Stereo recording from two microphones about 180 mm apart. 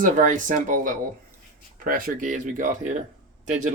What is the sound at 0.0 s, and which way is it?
Speech, 45° right (ahead or behind).